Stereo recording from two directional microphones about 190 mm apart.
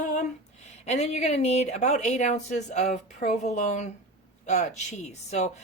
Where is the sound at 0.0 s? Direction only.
40° left (ahead or behind).